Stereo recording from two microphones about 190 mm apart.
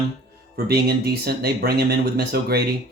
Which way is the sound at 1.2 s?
55° right (ahead or behind).